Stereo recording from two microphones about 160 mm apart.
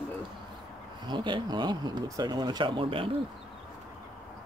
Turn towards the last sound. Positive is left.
turn(degrees=-35)  # may be behind; listen again after turning